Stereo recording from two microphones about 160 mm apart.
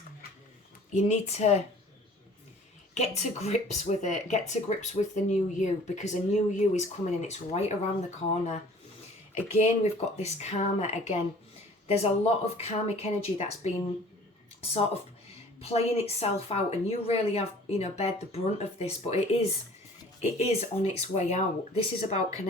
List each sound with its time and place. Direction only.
0.9 s speech: 45° left (ahead or behind)
2.9 s speech: 45° left (ahead or behind)
9.6 s speech: 45° left (ahead or behind)